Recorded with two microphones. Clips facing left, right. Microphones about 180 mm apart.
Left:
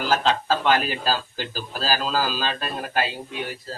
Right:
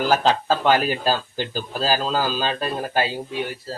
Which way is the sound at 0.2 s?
35° right (ahead or behind).